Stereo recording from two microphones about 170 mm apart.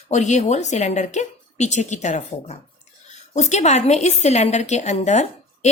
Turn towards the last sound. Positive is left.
turn(degrees=40)  # may be behind; listen again after turning